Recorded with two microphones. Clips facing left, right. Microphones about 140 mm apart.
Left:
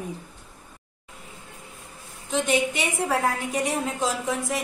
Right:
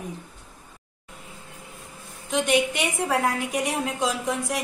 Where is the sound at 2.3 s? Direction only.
Centre (ahead or behind).